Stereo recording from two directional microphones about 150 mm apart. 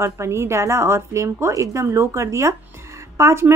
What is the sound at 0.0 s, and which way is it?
A woman's voice, 15° right (ahead or behind).